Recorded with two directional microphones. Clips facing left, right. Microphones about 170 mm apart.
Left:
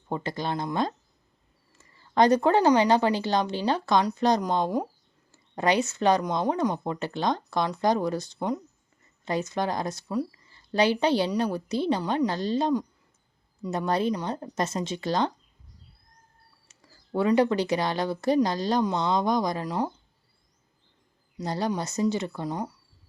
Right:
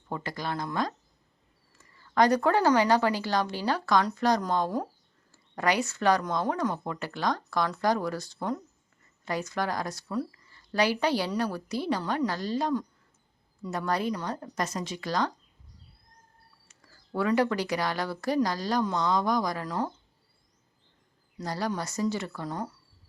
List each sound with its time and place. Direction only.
0.1 s a woman's voice: 25° left (ahead or behind)
17.2 s a woman's voice: 20° left (ahead or behind)
21.3 s a woman's voice: 20° left (ahead or behind)